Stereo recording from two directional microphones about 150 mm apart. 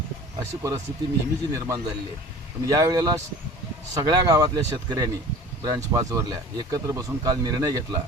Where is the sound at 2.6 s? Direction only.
20° right (ahead or behind).